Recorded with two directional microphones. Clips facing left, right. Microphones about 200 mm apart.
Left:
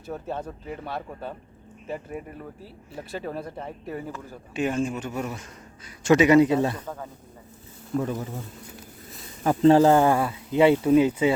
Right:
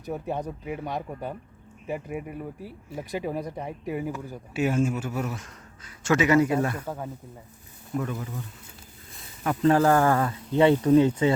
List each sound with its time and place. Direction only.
0.0 s speech: 15° right (ahead or behind)
6.0 s speech: 15° left (ahead or behind)
6.8 s speech: 10° right (ahead or behind)
7.9 s a man's voice: 30° left (ahead or behind)
9.4 s speech: 35° left (ahead or behind); by 11.3 s 10° left (ahead or behind)